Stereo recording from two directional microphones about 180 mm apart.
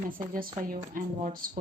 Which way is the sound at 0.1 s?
50° right (ahead or behind).